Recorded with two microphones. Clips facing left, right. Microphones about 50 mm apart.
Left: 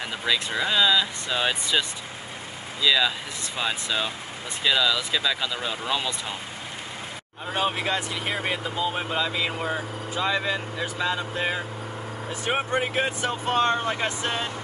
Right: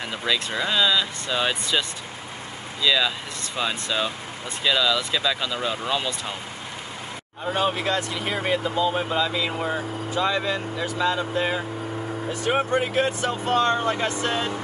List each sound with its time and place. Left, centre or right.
0.2 s speech: centre
7.4 s speech: centre
9.6 s speech: centre
12.5 s speech: left